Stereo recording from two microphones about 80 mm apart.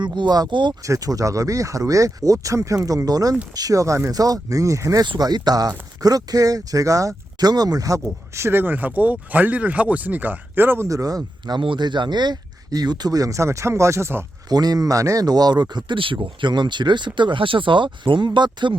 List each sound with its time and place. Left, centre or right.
0.0 s speech: right
0.9 s speech: right
4.1 s speech: right
5.0 s speech: right
10.8 s speech: right
11.5 s speech: right
14.5 s speech: right
15.7 s speech: right